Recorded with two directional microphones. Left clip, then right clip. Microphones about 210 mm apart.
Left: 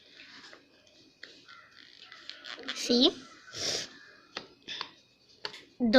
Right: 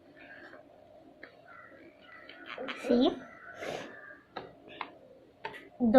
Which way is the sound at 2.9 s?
50° left (ahead or behind).